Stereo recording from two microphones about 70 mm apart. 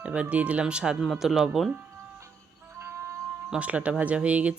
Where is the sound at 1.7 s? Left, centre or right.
Right.